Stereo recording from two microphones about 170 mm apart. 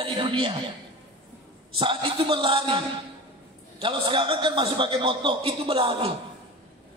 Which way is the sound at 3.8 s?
30° right (ahead or behind).